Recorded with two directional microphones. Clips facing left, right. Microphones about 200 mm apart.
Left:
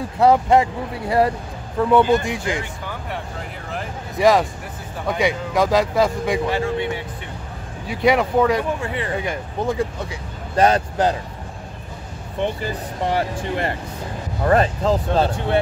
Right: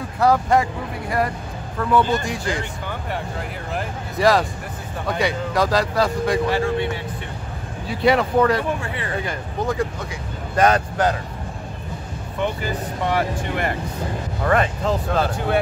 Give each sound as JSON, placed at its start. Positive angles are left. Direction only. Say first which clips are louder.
{"t": 0.2, "sound": "speech", "louder": "left 3 dB", "side_deg": 25}
{"t": 4.2, "sound": "speech", "louder": "left 2 dB", "side_deg": 15}
{"t": 12.4, "sound": "speech", "louder": "left 1 dB", "side_deg": 30}